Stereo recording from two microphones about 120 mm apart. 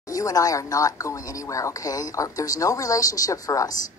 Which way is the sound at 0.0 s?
30° left (ahead or behind).